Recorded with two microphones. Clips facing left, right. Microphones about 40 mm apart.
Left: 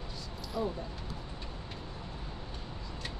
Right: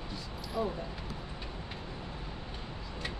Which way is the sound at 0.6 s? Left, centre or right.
Right.